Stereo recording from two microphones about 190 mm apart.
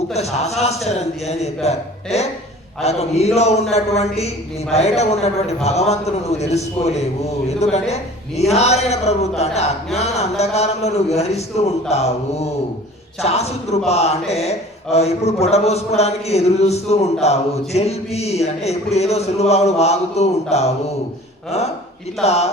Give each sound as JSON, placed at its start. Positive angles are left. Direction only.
{"t": 0.1, "sound": "speech", "side_deg": 35}
{"t": 13.2, "sound": "speech", "side_deg": 35}
{"t": 22.2, "sound": "speech", "side_deg": 35}